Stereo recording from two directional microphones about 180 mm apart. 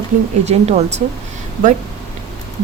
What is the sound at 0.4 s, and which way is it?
Speech, 35° right (ahead or behind).